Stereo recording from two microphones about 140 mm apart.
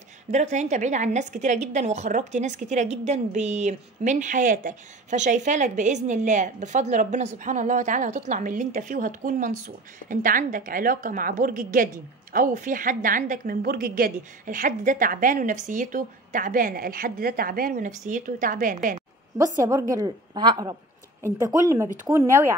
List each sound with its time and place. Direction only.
0.3 s a woman's voice: 55° right (ahead or behind); by 18.9 s 75° right (ahead or behind)
18.9 s a woman's voice: 20° right (ahead or behind)